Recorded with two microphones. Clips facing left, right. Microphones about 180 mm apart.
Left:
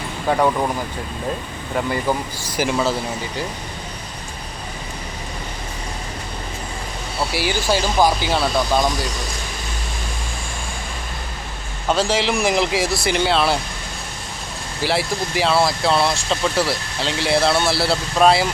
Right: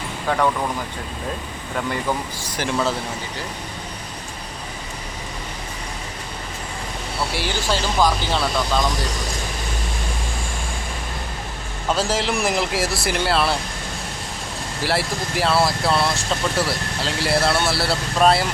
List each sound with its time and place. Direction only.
0.3 s speech: 15° left (ahead or behind)
1.7 s speech: 5° left (ahead or behind)
7.3 s speech: 10° left (ahead or behind)
11.9 s speech: centre (ahead or behind)
14.8 s speech: centre (ahead or behind)